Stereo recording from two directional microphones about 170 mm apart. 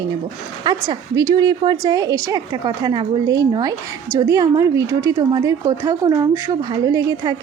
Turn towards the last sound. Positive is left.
turn(degrees=-20)  # may be behind; listen again after turning